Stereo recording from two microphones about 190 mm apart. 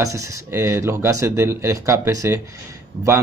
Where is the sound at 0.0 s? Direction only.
15° right (ahead or behind).